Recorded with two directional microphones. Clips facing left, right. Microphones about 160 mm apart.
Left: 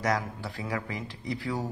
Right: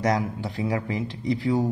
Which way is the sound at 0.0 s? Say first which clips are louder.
Right 5 dB; 20° right (ahead or behind).